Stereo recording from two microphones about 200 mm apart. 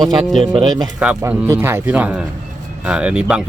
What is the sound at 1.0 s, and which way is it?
A man's voice, 5° right (ahead or behind).